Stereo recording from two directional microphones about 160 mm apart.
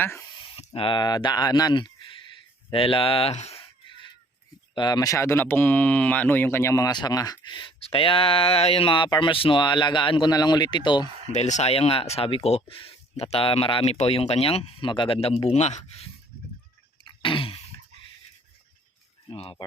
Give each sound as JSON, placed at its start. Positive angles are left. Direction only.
{"t": 0.0, "sound": "speech", "side_deg": 15}
{"t": 0.5, "sound": "speech", "side_deg": 35}
{"t": 2.6, "sound": "a sound", "side_deg": 35}
{"t": 4.7, "sound": "speech", "side_deg": 25}
{"t": 11.3, "sound": "speech", "side_deg": 45}
{"t": 17.0, "sound": "a sound", "side_deg": 30}
{"t": 19.3, "sound": "speech", "side_deg": 35}